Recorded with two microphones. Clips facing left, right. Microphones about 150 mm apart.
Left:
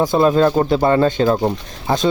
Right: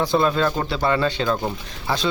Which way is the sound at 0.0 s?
40° left (ahead or behind).